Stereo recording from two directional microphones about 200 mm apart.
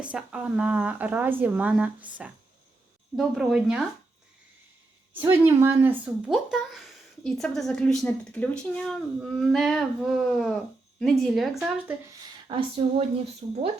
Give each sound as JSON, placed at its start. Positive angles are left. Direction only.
{"t": 0.0, "sound": "a woman's voice", "side_deg": -5}
{"t": 5.2, "sound": "speech", "side_deg": -10}
{"t": 12.5, "sound": "speech", "side_deg": -25}